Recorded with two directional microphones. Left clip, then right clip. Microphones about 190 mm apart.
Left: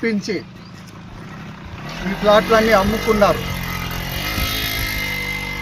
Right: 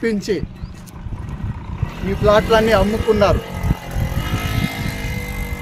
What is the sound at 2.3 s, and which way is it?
Speech, 30° right (ahead or behind).